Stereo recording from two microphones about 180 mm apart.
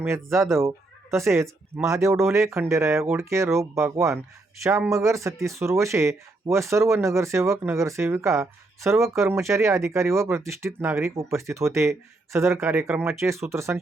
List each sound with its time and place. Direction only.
0.0 s speech: 15° right (ahead or behind)